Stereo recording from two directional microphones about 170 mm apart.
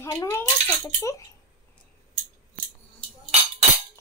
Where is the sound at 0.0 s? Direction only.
20° left (ahead or behind).